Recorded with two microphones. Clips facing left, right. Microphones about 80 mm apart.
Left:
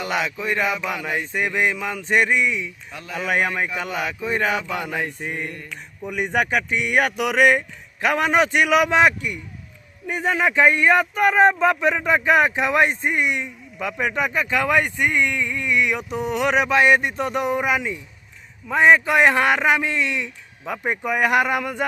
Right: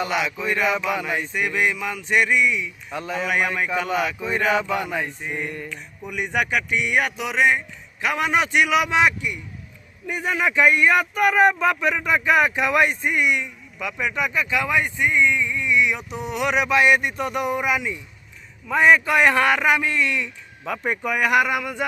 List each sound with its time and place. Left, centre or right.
0.4 s speech: left
2.9 s speech: right
3.2 s speech: left
4.5 s speech: right
6.1 s speech: left
8.0 s a man's voice: left